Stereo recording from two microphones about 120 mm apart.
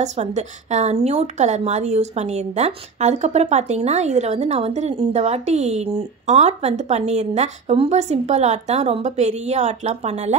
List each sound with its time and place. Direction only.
0.0 s a woman's voice: 75° right (ahead or behind)